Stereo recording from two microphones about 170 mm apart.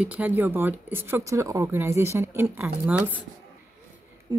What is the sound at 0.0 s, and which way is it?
Speech, 10° right (ahead or behind).